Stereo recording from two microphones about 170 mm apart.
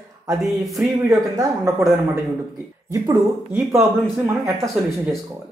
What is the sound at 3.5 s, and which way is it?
Speech, 5° right (ahead or behind).